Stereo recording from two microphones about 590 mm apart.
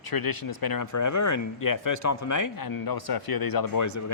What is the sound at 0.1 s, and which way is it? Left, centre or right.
Speech, left.